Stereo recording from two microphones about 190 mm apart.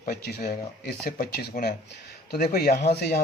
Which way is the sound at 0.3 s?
55° left (ahead or behind).